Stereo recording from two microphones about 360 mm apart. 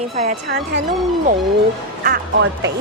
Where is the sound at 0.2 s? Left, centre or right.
Right.